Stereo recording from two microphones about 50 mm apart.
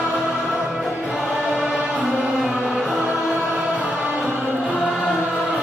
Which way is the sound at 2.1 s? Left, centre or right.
Centre.